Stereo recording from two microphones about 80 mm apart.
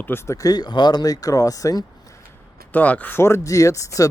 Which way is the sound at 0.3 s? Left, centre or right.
Left.